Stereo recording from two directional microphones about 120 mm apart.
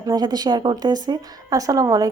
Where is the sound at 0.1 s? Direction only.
35° right (ahead or behind).